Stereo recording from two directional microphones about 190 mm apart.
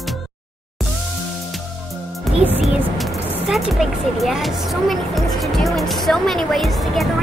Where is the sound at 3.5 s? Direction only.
Centre (ahead or behind).